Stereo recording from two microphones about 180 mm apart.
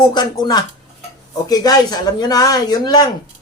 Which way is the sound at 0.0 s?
25° left (ahead or behind).